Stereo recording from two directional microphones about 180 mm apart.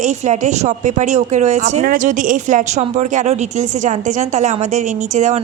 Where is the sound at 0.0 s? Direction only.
40° right (ahead or behind).